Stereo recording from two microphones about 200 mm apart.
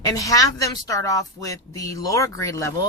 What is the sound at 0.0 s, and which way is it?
Speech, 15° left (ahead or behind).